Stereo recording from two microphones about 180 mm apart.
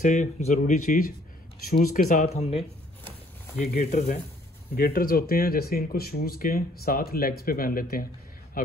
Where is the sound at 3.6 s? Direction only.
50° left (ahead or behind).